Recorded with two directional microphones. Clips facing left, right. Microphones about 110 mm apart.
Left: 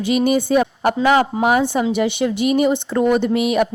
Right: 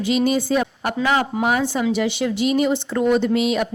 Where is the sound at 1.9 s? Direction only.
55° left (ahead or behind).